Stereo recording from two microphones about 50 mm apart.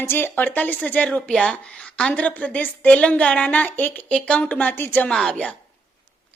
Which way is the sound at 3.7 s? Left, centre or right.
Left.